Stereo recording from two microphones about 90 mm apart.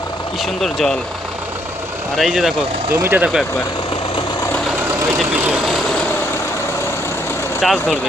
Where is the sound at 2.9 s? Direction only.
25° right (ahead or behind).